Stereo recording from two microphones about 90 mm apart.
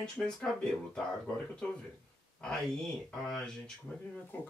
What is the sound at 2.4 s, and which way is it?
Speech, 5° left (ahead or behind).